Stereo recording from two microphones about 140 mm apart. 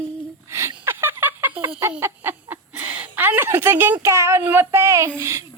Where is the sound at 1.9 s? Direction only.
15° right (ahead or behind).